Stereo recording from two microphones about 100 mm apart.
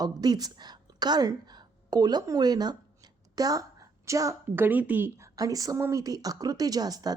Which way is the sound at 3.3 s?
35° right (ahead or behind).